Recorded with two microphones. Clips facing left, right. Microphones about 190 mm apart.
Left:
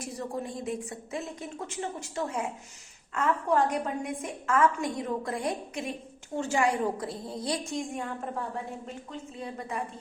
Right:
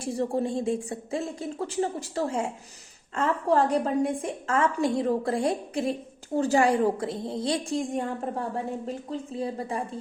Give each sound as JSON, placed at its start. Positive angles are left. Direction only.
{"t": 0.0, "sound": "a woman's voice", "side_deg": -30}